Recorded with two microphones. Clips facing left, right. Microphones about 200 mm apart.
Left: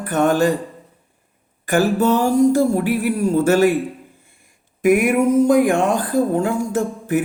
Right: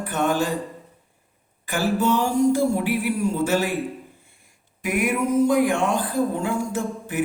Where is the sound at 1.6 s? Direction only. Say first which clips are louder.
Left 6 dB; 45° left (ahead or behind).